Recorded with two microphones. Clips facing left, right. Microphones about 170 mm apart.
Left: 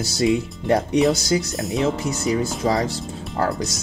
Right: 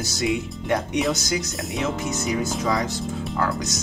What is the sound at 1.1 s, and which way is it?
Speech, 30° left (ahead or behind).